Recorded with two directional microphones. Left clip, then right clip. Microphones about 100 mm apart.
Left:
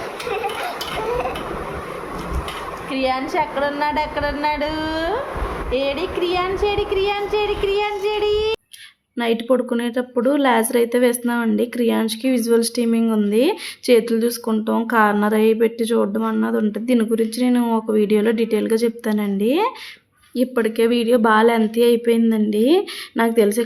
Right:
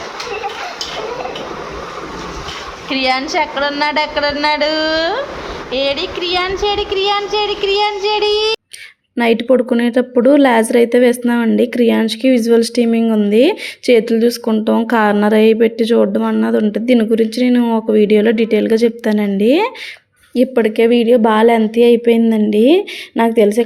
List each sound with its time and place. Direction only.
2.9 s a woman's voice: 20° right (ahead or behind)
5.7 s child singing: 10° right (ahead or behind)
9.1 s a woman's voice: 45° right (ahead or behind); by 14.5 s 25° right (ahead or behind)
14.8 s a woman's voice: 35° right (ahead or behind)
17.6 s a woman's voice: 20° right (ahead or behind); by 20.8 s 35° right (ahead or behind)
20.8 s speech: 20° right (ahead or behind)